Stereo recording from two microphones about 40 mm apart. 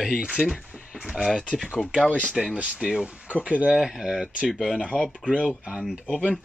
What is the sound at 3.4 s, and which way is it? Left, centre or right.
Speech, right.